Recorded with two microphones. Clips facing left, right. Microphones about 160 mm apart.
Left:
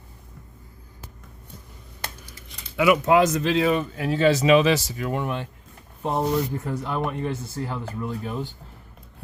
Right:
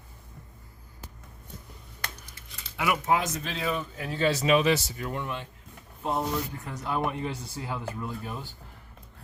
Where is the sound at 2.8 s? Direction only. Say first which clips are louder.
Left 9 dB; 90° left.